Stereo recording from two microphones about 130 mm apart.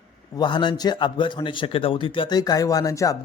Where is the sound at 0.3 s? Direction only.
35° left (ahead or behind).